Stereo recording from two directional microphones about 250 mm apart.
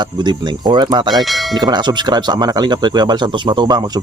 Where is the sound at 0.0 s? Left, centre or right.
Centre.